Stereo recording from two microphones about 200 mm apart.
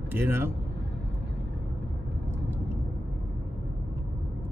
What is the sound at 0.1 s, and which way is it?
Speech, 10° right (ahead or behind).